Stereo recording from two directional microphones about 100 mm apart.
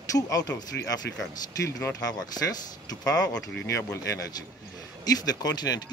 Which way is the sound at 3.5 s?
10° left (ahead or behind).